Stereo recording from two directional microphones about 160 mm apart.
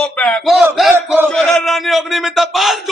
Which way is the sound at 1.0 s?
15° right (ahead or behind).